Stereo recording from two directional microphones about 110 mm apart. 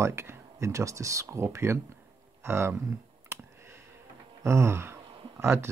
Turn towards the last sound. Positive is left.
turn(degrees=-20)  # may be behind; listen again after turning